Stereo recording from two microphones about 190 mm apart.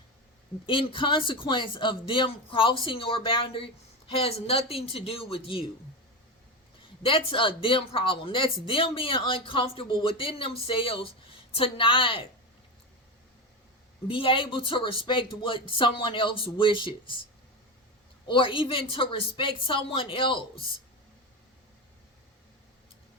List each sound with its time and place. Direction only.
0.6 s speech: 30° left (ahead or behind)
7.0 s speech: 30° left (ahead or behind)
14.1 s speech: 25° left (ahead or behind)
18.3 s speech: 25° left (ahead or behind)